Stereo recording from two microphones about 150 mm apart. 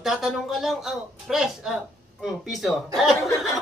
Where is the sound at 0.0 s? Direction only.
Centre (ahead or behind).